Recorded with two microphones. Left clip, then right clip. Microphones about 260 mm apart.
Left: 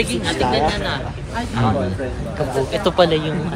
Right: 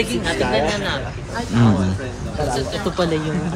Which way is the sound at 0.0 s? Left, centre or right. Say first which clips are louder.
Left 1 dB; centre.